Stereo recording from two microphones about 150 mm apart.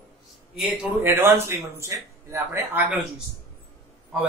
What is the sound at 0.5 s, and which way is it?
Speech, centre (ahead or behind).